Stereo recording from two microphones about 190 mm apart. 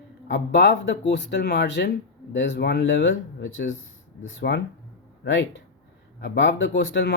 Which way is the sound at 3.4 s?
80° left.